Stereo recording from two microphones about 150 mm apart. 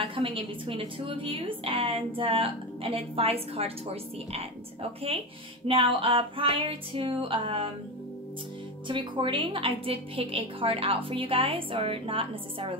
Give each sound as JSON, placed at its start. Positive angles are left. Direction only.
{"t": 0.0, "sound": "a woman's voice", "side_deg": -35}
{"t": 5.7, "sound": "a woman's voice", "side_deg": -35}
{"t": 8.8, "sound": "a woman's voice", "side_deg": -35}